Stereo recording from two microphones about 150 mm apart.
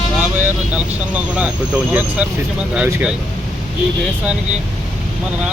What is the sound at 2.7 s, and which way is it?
Speech, 5° right (ahead or behind).